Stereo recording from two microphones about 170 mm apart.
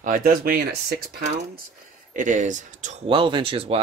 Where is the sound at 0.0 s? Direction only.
55° right (ahead or behind).